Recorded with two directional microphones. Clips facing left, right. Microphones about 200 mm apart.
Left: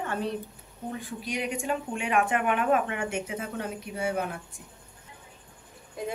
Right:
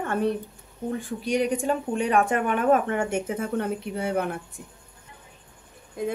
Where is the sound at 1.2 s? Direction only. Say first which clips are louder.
Right 8 dB; 40° right (ahead or behind); by 4.6 s 55° right (ahead or behind).